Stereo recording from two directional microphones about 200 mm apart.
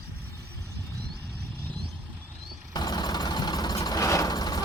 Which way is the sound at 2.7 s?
20° left (ahead or behind).